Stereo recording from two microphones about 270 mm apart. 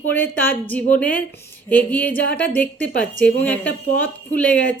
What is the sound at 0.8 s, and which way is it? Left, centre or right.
Speech, left.